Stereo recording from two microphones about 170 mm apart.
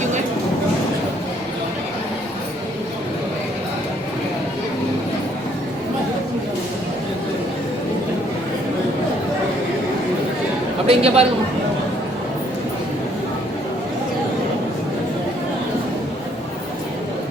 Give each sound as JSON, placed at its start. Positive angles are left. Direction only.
{"t": 10.8, "sound": "speech", "side_deg": -35}